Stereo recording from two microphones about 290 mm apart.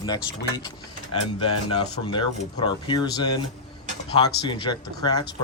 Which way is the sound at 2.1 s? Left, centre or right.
Centre.